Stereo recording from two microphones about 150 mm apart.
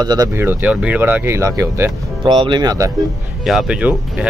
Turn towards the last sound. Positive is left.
turn(degrees=-10)  # may be behind; listen again after turning